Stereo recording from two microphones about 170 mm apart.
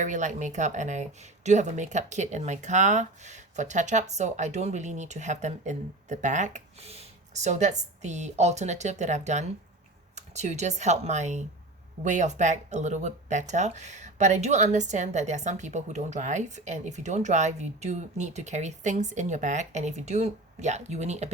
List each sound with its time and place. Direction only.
0.0 s speech: 45° right (ahead or behind)